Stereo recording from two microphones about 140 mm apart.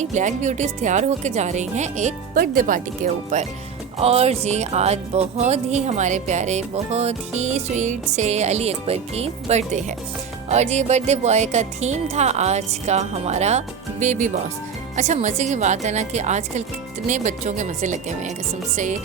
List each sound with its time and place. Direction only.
0.0 s speech: 60° right (ahead or behind)
3.9 s speech: 45° right (ahead or behind)